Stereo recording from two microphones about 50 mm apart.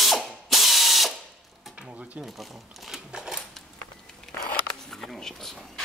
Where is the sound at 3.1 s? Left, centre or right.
Centre.